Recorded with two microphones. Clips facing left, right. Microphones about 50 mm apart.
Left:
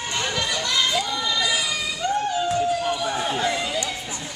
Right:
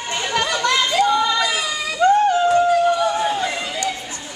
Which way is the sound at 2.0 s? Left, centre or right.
Right.